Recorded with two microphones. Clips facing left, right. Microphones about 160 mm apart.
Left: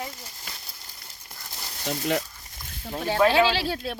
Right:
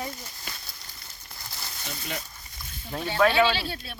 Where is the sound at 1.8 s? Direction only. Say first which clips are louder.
Left 11 dB; 40° left (ahead or behind).